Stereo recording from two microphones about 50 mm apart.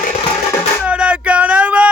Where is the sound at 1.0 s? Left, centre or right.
Right.